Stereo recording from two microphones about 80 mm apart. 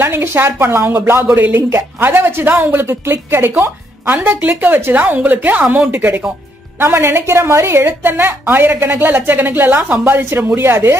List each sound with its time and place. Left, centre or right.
0.0 s a woman's voice: right